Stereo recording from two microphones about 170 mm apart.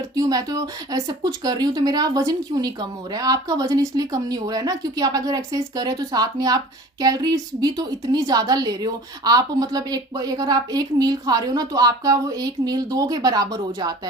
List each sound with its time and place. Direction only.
0.2 s a woman's voice: 20° right (ahead or behind)